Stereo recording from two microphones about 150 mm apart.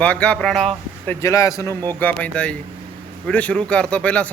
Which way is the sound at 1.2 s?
20° left (ahead or behind).